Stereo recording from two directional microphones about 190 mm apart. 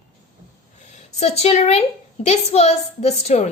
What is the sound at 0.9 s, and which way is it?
A woman's voice, 35° left (ahead or behind).